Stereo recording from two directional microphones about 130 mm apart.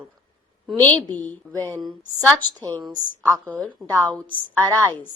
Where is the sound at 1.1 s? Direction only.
15° left (ahead or behind).